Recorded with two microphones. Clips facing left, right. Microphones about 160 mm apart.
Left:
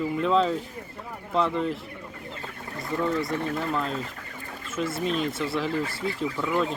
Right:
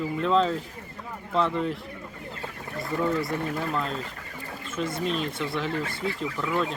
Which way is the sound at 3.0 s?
Centre (ahead or behind).